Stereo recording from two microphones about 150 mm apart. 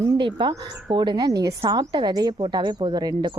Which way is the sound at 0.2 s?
30° right (ahead or behind).